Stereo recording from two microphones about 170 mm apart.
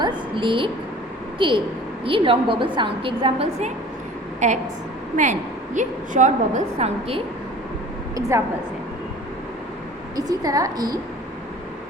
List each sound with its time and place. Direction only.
0.0 s a sound: 30° right (ahead or behind)
1.4 s a woman's voice: 30° right (ahead or behind)
4.4 s a woman's voice: 45° right (ahead or behind)
8.3 s a woman's voice: 15° right (ahead or behind)
10.2 s a woman's voice: 20° right (ahead or behind)